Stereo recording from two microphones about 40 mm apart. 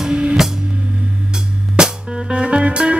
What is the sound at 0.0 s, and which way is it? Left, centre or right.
Music, right.